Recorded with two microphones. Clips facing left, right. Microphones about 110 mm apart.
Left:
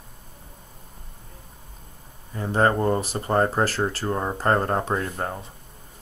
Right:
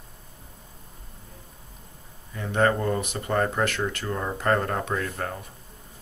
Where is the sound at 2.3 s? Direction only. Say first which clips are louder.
Left 2 dB; 35° left (ahead or behind).